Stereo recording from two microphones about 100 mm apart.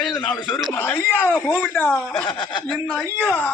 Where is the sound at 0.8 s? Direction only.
25° left (ahead or behind).